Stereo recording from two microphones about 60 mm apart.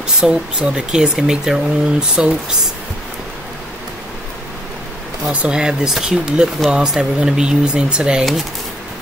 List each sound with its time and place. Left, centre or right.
0.2 s speech: centre
5.3 s speech: centre